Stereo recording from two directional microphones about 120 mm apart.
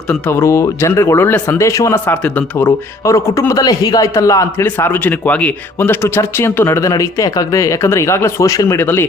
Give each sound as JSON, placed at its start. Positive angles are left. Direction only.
{"t": 0.1, "sound": "speech", "side_deg": 20}